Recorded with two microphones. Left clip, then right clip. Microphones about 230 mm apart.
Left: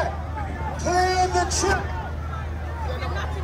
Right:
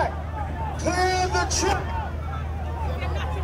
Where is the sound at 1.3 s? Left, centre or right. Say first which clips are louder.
Left 1 dB; right.